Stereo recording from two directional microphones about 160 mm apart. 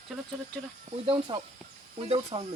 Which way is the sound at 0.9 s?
35° right (ahead or behind).